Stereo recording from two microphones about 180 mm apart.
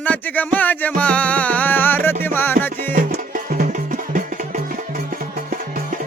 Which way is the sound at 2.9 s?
50° right (ahead or behind).